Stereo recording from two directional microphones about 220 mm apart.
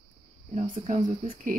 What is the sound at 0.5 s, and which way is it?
Speech, 30° right (ahead or behind).